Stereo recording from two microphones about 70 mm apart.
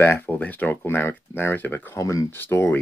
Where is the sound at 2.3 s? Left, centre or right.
Left.